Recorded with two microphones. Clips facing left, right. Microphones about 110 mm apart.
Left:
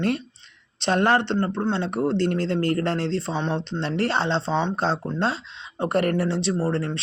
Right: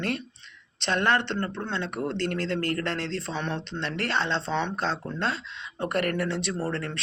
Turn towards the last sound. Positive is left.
turn(degrees=30)  # may be behind; listen again after turning